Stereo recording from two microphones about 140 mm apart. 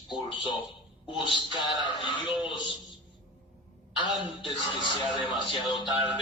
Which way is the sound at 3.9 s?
35° left (ahead or behind).